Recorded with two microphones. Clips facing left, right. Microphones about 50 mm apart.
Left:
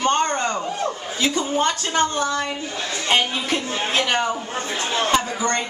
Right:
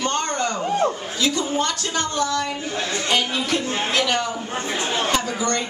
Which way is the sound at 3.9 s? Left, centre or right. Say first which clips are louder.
Left 2 dB; left.